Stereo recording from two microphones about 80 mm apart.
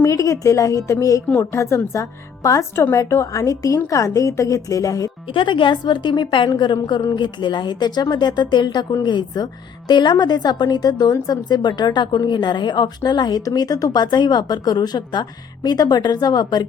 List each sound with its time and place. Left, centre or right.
0.0 s a woman's voice: left
5.3 s a woman's voice: left
6.6 s a woman's voice: left